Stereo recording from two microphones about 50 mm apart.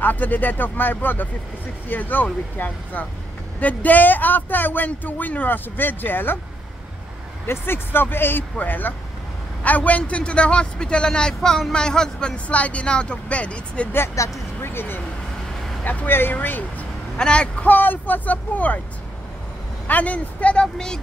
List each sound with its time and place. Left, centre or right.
0.0 s speech: left
7.4 s a man's voice: left
14.2 s speech: left
14.6 s vehicle: left
15.8 s speech: left
16.1 s speech: left
16.3 s speech: left
17.2 s a man's voice: left
17.6 s speech: left
19.9 s a man's voice: left
20.6 s a woman's voice: centre